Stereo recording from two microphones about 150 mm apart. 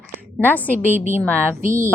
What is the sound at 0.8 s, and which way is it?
Speech, 15° right (ahead or behind).